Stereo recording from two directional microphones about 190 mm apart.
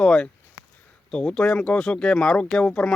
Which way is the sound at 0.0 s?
5° left (ahead or behind).